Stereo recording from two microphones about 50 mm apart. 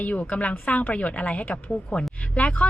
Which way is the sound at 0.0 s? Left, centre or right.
Left.